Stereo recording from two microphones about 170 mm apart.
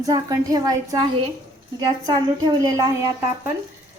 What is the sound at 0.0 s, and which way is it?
Speech, 20° right (ahead or behind).